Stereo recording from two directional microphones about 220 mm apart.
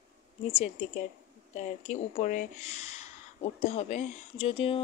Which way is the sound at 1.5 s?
30° left (ahead or behind).